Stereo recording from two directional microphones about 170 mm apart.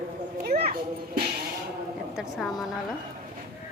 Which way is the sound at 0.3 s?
65° right (ahead or behind).